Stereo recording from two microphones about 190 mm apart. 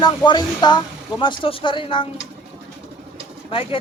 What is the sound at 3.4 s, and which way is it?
Speech, 30° left (ahead or behind).